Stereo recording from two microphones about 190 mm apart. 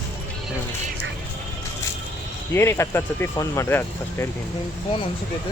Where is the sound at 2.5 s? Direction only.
15° left (ahead or behind).